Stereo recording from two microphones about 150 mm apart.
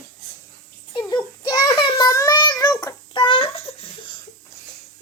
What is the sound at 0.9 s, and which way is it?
A child's voice, 25° left (ahead or behind).